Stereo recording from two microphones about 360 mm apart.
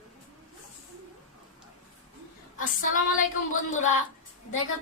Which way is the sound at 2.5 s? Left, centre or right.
Left.